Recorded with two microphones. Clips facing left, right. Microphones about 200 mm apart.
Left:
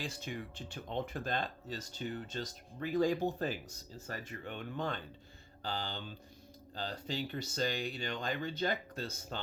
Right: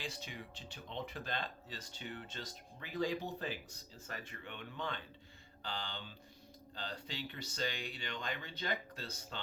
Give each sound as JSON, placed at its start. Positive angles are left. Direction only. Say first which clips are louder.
{"t": 0.0, "sound": "speech", "louder": "left 5 dB", "side_deg": 50}